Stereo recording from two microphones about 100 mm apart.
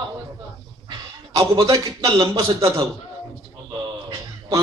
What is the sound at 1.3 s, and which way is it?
A man's voice, 40° right (ahead or behind).